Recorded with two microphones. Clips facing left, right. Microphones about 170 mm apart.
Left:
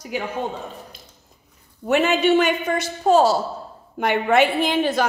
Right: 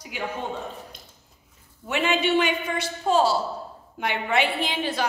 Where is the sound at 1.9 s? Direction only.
45° left (ahead or behind).